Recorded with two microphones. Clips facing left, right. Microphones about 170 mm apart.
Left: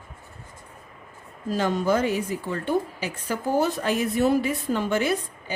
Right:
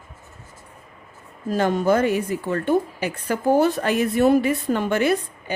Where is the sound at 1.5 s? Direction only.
55° right (ahead or behind).